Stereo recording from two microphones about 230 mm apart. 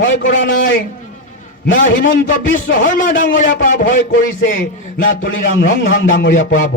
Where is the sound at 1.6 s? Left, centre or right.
Left.